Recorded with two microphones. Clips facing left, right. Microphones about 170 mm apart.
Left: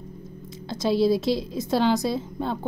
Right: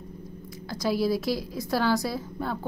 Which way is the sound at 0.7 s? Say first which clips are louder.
Left 4 dB; 25° left (ahead or behind).